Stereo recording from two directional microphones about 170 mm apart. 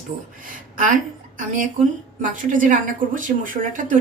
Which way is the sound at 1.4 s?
50° right (ahead or behind).